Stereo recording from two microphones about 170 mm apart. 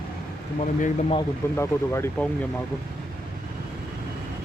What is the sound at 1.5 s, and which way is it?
Speech, 15° left (ahead or behind).